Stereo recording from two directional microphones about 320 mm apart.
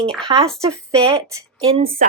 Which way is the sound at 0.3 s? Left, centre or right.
Centre.